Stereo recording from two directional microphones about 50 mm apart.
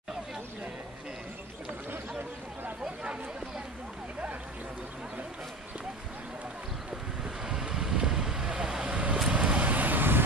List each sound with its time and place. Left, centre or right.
3.0 s chatter: right
7.4 s vehicle: centre; by 10.2 s right